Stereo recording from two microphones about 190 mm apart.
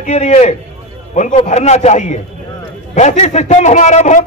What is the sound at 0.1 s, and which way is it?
Speech, 35° left (ahead or behind).